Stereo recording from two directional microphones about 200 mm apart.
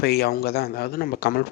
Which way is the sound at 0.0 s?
50° left (ahead or behind).